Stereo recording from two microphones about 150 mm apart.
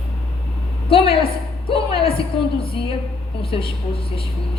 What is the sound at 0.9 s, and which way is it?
A woman's voice, 40° left (ahead or behind).